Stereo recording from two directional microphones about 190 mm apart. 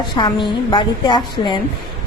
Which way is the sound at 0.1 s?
25° left (ahead or behind).